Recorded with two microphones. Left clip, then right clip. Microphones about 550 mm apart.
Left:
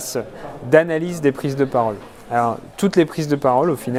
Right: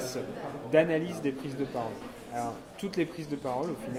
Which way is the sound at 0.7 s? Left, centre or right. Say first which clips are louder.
Left 10 dB; left.